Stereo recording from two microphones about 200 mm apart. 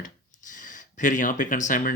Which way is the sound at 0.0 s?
40° left (ahead or behind).